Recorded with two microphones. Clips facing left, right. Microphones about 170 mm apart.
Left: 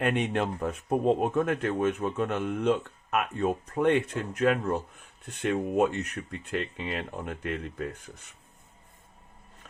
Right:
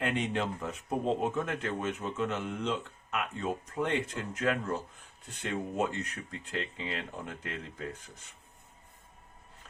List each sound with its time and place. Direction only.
0.0 s speech: 60° left (ahead or behind)